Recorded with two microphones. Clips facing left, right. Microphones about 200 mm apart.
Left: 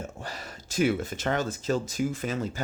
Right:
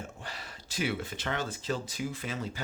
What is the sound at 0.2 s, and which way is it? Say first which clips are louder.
Speech: left 5 dB; 45° left (ahead or behind).